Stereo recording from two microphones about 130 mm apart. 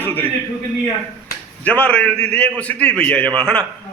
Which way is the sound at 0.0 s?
15° left (ahead or behind).